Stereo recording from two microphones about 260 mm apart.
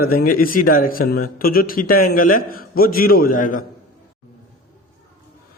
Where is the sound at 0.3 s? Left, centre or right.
Left.